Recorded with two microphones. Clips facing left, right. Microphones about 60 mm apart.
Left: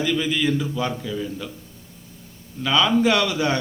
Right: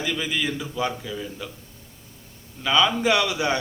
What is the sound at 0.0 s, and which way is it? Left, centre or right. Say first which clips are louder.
A man's voice: left 5 dB; centre.